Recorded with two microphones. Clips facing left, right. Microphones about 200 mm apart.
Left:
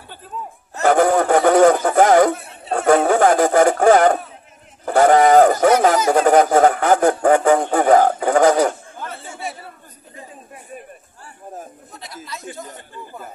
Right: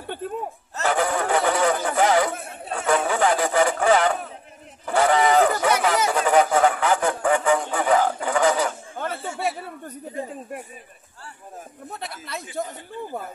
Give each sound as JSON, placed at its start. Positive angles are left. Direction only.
{"t": 0.8, "sound": "speech", "side_deg": 45}